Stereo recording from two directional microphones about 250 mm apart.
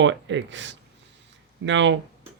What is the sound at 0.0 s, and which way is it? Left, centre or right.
Speech, right.